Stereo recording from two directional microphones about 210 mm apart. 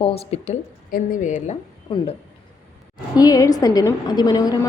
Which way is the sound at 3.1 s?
15° left (ahead or behind).